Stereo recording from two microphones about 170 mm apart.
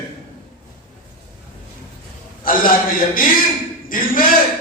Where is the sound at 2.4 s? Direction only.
55° left (ahead or behind).